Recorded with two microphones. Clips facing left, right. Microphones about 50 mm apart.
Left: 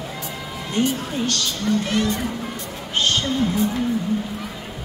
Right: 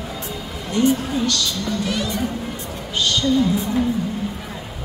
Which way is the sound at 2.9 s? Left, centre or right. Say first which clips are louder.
Right 1 dB; left.